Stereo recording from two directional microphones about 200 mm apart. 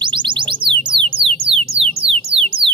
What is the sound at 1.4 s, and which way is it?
Music, 30° right (ahead or behind).